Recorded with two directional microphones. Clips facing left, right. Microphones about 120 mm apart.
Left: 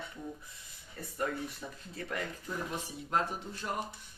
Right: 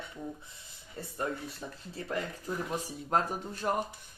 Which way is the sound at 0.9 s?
25° right (ahead or behind).